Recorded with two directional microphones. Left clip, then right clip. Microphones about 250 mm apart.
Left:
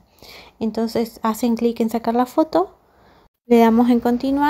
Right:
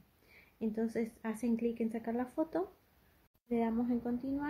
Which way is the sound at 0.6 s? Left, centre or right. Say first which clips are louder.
Left 15 dB; left.